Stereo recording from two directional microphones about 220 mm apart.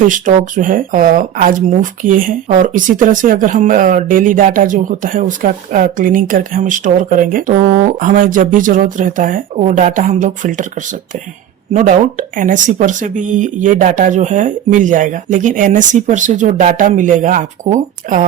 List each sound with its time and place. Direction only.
0.1 s speech: 35° right (ahead or behind)
11.7 s speech: 35° right (ahead or behind)